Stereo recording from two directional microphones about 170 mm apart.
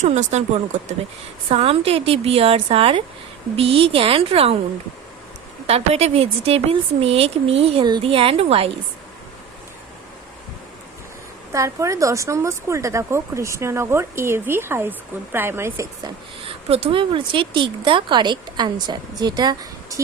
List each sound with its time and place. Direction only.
0.0 s speech: 45° right (ahead or behind)
5.6 s speech: 40° right (ahead or behind)
11.5 s a woman's voice: 20° right (ahead or behind)
16.6 s speech: 35° right (ahead or behind)